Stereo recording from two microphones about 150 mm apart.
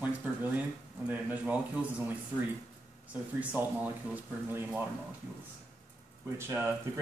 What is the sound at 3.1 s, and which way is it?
Speech, 10° right (ahead or behind).